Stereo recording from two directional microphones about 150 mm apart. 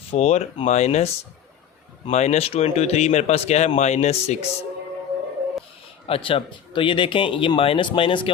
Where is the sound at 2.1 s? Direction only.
50° left (ahead or behind).